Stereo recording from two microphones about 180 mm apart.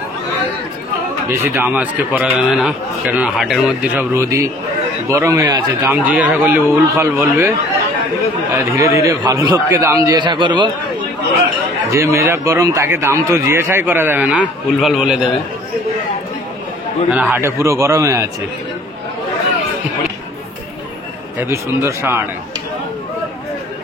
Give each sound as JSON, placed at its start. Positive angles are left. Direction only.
{"t": 1.4, "sound": "a man's voice", "side_deg": -10}
{"t": 8.5, "sound": "a man's voice", "side_deg": -15}
{"t": 11.9, "sound": "a man's voice", "side_deg": -15}
{"t": 17.1, "sound": "a man's voice", "side_deg": -10}
{"t": 21.4, "sound": "a man's voice", "side_deg": -15}